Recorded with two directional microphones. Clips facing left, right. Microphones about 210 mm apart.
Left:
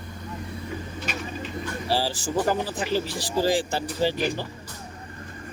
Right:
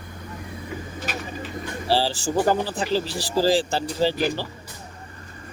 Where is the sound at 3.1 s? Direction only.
35° right (ahead or behind).